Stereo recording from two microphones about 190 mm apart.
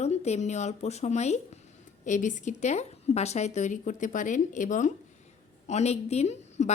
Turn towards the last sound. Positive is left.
turn(degrees=40)  # may be behind; listen again after turning